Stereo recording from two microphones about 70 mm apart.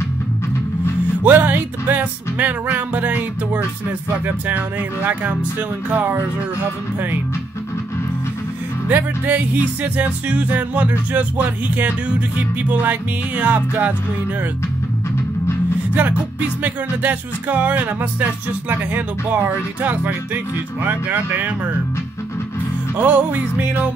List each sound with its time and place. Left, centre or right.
1.2 s music: right
8.8 s music: right
13.4 s music: right
15.9 s music: right
22.9 s music: right